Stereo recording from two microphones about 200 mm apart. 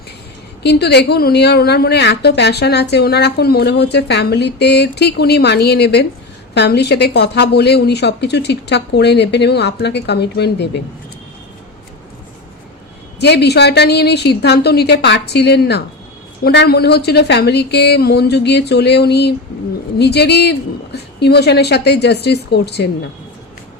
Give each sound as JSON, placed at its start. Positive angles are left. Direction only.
{"t": 0.6, "sound": "a woman's voice", "side_deg": 55}
{"t": 13.1, "sound": "a woman's voice", "side_deg": 55}